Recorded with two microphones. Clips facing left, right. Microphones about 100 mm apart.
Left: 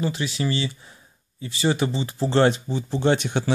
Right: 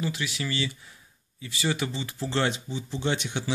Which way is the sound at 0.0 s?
30° left (ahead or behind).